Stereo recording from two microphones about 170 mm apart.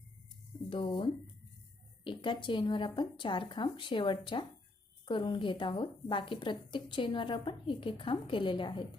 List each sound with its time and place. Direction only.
0.7 s a woman's voice: 30° left (ahead or behind)